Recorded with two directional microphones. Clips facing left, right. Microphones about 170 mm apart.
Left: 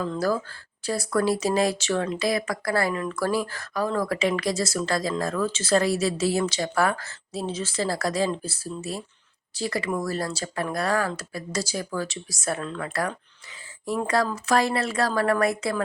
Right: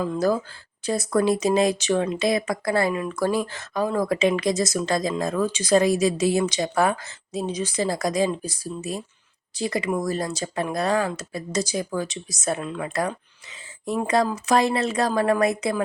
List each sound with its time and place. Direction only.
0.0 s speech: 15° right (ahead or behind)